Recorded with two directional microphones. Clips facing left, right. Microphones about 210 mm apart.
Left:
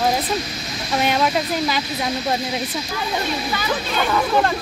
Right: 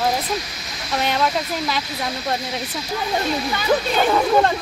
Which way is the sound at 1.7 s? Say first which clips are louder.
Left 3 dB; 5° left (ahead or behind).